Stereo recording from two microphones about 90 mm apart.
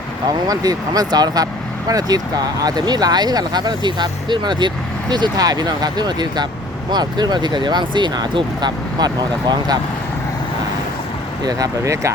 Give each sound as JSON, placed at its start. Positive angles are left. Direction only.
{"t": 0.3, "sound": "speech", "side_deg": -45}
{"t": 11.4, "sound": "speech", "side_deg": -45}